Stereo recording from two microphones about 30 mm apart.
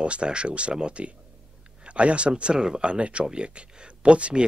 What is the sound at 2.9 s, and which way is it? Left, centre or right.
Speech, right.